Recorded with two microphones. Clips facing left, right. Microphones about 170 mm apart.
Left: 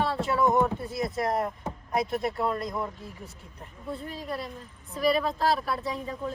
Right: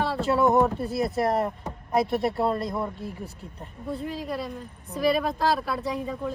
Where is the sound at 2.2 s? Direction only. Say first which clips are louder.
Right 4 dB; 30° right (ahead or behind).